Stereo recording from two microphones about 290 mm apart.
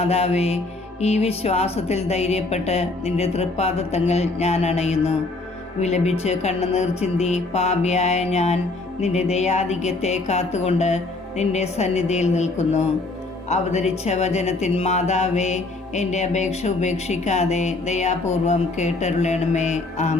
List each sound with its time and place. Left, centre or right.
0.0 s speech: left